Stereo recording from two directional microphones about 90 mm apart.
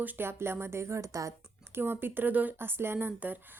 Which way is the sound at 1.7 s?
25° right (ahead or behind).